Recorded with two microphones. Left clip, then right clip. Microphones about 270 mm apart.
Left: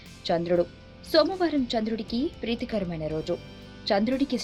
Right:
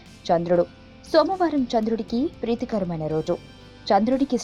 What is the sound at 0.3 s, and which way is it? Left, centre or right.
Speech, centre.